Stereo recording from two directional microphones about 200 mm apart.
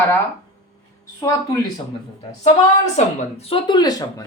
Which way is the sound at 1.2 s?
20° left (ahead or behind).